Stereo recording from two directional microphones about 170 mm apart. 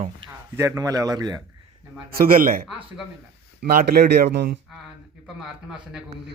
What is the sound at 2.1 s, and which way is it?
Speech, 55° right (ahead or behind).